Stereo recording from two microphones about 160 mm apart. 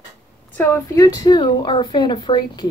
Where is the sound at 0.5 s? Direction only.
15° left (ahead or behind); by 2.7 s 30° left (ahead or behind).